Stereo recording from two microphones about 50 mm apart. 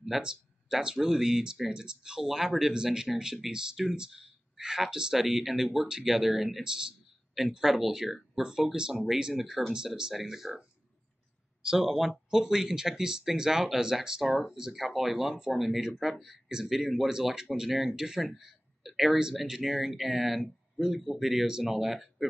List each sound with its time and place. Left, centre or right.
0.2 s speech: centre
6.6 s a sound: centre
7.6 s speech: centre
11.8 s speech: centre